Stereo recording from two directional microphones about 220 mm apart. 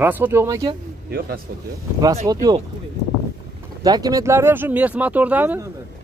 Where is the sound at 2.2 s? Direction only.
15° right (ahead or behind).